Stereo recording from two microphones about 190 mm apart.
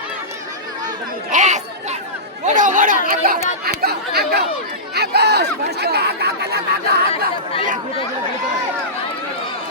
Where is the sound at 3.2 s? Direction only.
50° right (ahead or behind).